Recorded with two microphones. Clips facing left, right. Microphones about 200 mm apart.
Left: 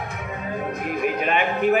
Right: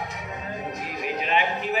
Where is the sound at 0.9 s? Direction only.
55° left (ahead or behind).